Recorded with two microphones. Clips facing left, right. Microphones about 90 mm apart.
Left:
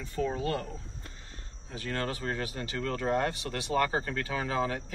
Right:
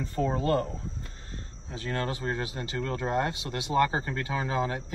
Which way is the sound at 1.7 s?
25° right (ahead or behind).